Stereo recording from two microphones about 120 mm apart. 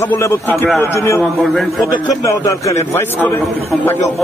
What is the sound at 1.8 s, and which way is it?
A man's voice, 25° left (ahead or behind).